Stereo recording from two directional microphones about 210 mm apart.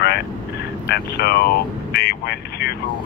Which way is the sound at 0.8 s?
50° left (ahead or behind).